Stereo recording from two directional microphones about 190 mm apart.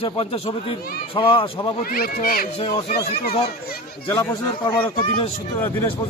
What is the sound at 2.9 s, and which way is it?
Speech, 55° left (ahead or behind).